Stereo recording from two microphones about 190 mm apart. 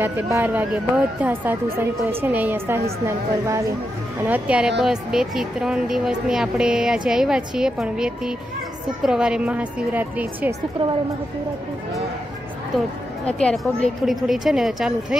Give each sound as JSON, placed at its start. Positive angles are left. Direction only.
{"t": 0.0, "sound": "speech", "side_deg": -10}
{"t": 4.3, "sound": "a woman's voice", "side_deg": -5}
{"t": 13.4, "sound": "a woman's voice", "side_deg": 5}